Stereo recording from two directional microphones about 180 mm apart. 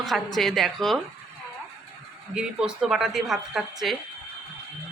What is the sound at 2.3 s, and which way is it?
A woman's voice, 5° right (ahead or behind).